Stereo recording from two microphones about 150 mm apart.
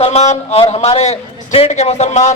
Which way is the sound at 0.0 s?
45° left (ahead or behind).